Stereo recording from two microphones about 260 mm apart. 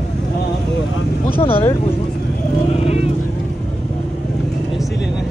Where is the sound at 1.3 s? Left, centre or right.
Left.